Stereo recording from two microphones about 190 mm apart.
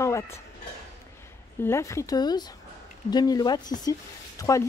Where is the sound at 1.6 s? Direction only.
15° left (ahead or behind).